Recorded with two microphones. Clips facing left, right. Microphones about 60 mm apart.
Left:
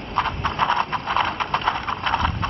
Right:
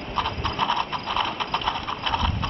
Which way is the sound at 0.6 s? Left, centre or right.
Left.